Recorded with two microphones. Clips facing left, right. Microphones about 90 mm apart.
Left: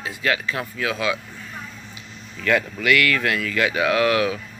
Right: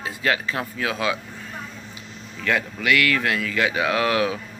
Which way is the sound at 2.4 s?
15° right (ahead or behind).